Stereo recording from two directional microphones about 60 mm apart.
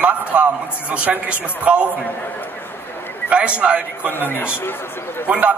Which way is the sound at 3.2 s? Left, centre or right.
Centre.